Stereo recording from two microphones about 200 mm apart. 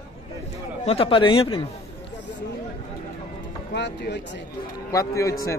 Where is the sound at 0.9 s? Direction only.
25° left (ahead or behind).